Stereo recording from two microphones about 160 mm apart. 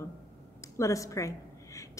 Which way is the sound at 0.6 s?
20° left (ahead or behind).